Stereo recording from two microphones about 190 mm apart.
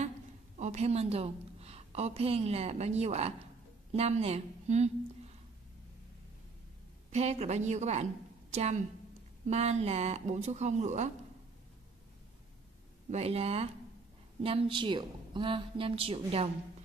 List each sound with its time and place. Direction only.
0.6 s a woman's voice: 35° right (ahead or behind)
7.1 s a woman's voice: 35° right (ahead or behind)
13.1 s a woman's voice: 35° right (ahead or behind)